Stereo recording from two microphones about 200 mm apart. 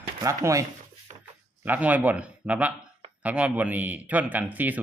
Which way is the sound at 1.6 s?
10° right (ahead or behind).